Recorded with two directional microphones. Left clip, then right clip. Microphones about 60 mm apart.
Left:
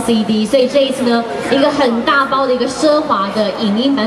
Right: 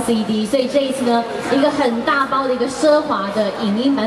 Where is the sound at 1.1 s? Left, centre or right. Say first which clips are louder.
Left 3 dB; left.